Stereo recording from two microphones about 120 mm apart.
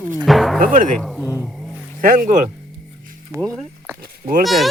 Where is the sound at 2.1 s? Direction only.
90° right.